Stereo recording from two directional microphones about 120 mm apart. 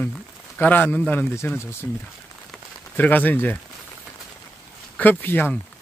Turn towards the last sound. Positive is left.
turn(degrees=15)  # may be behind; listen again after turning